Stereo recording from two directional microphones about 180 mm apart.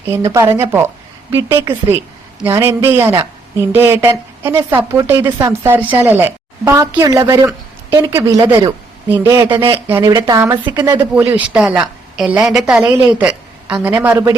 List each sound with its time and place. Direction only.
0.1 s a man's voice: 15° right (ahead or behind)
9.8 s speech: 15° right (ahead or behind)
11.1 s a woman's voice: 10° right (ahead or behind)